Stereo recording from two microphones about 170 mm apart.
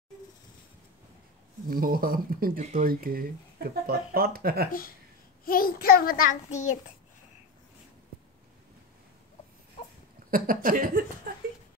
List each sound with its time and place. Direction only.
1.7 s speech: 55° right (ahead or behind)
5.4 s child singing: 55° left (ahead or behind)
10.3 s speech: 55° right (ahead or behind)